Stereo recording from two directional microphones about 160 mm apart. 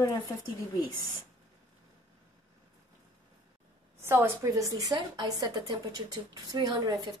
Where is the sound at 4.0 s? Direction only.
15° right (ahead or behind).